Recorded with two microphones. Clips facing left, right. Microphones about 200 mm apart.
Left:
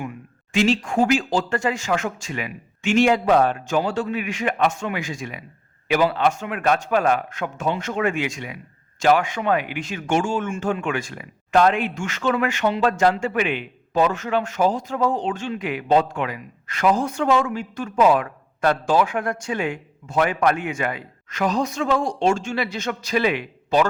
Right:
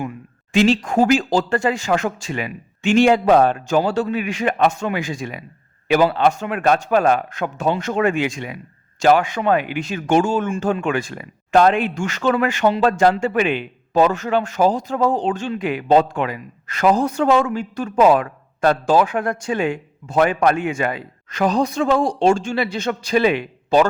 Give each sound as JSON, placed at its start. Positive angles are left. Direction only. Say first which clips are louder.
{"t": 0.5, "sound": "speech", "louder": "right 4 dB", "side_deg": -35}